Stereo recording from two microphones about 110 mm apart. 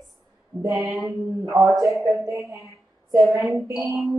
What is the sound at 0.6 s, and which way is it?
Mantra, 25° right (ahead or behind).